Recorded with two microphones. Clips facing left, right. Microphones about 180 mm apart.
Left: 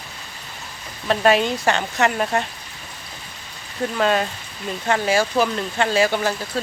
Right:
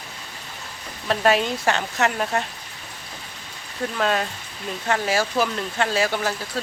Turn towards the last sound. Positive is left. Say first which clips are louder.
# left 3 dB
turn(degrees=0)  # may be behind; listen again after turning